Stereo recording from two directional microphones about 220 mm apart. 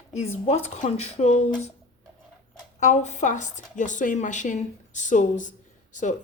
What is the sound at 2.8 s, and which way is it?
A woman's voice, 30° left (ahead or behind).